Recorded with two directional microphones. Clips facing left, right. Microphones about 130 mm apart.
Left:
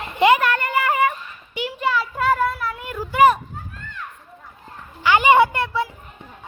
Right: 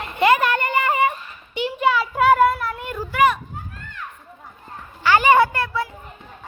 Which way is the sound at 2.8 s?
5° left (ahead or behind).